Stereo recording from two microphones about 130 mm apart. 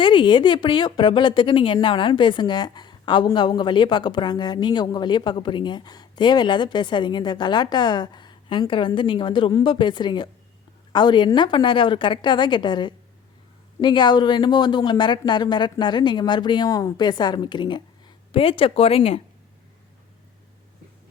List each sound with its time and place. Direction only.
0.0 s speech: 40° left (ahead or behind)